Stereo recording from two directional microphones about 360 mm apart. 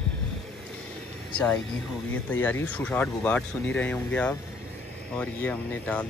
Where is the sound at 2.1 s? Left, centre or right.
Centre.